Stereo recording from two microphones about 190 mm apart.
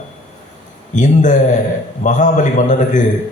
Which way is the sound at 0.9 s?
40° left (ahead or behind).